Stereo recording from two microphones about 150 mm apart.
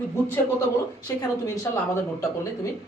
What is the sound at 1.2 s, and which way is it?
Speech, 20° left (ahead or behind).